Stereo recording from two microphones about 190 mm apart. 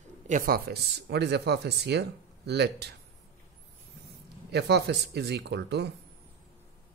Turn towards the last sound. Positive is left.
turn(degrees=-60)  # may be behind; listen again after turning